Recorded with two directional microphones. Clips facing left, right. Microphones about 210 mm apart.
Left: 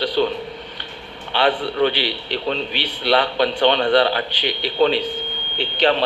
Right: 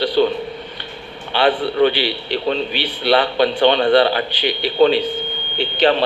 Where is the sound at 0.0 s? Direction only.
5° right (ahead or behind).